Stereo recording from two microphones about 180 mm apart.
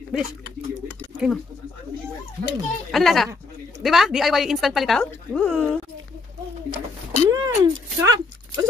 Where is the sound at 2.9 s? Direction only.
Centre (ahead or behind).